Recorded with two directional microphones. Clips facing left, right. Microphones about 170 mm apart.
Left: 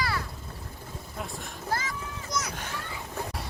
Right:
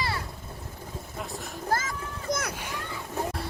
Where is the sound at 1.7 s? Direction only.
45° right (ahead or behind).